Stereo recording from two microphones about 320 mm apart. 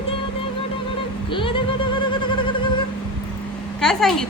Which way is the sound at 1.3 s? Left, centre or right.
Centre.